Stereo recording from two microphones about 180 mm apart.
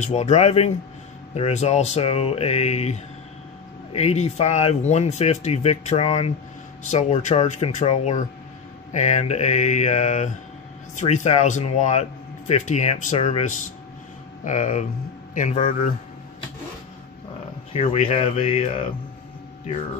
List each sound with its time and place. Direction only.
0.0 s speech: 40° left (ahead or behind)
17.7 s speech: 35° left (ahead or behind)